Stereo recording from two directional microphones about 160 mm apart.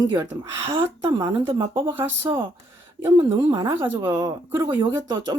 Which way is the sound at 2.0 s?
15° right (ahead or behind).